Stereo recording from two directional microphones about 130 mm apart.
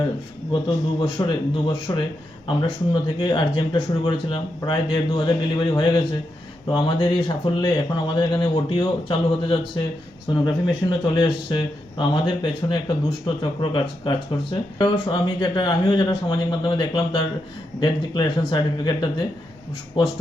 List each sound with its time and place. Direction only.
1.3 s speech: 40° left (ahead or behind)